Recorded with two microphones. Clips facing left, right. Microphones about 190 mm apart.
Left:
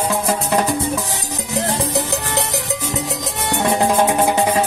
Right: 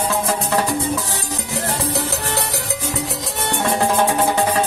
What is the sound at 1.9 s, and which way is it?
Music, 20° left (ahead or behind).